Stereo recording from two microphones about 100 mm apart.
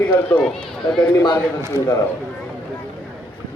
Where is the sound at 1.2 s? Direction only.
45° left (ahead or behind).